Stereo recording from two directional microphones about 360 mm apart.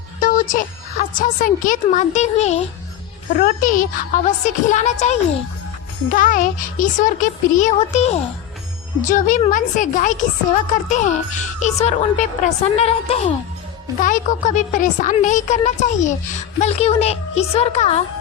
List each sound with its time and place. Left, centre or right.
0.2 s a woman's voice: left